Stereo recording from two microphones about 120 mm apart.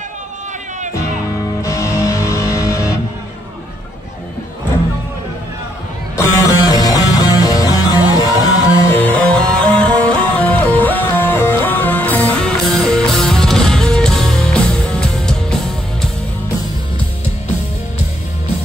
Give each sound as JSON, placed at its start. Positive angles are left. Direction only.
{"t": 1.6, "sound": "music", "side_deg": 25}
{"t": 6.1, "sound": "music", "side_deg": 25}
{"t": 8.7, "sound": "music", "side_deg": 20}